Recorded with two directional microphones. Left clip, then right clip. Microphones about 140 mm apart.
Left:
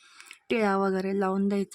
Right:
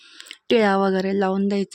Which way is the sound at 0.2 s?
25° right (ahead or behind).